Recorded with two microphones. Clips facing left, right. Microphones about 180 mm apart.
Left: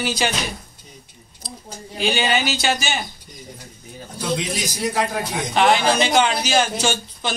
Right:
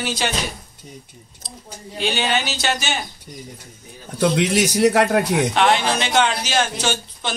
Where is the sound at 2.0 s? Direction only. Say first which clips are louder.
Left 1 dB; 5° left (ahead or behind).